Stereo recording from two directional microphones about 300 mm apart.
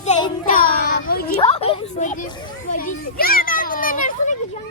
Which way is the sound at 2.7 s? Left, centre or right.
Left.